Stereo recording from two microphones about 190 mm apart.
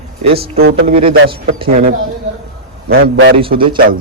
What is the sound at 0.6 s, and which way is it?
Speech, 90° right.